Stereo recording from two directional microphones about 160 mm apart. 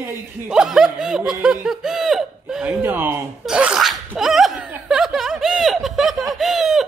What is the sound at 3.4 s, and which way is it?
Sneeze, 5° right (ahead or behind).